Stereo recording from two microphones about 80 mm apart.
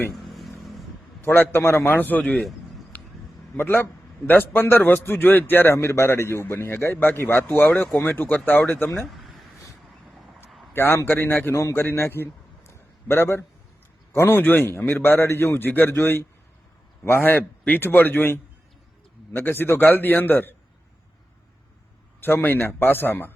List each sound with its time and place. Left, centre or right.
0.1 s vehicle: centre
1.2 s a man's voice: left
2.9 s a sound: left
3.6 s a man's voice: left
9.0 s a sound: centre
10.8 s a man's voice: left
19.4 s a man's voice: left
22.2 s a man's voice: left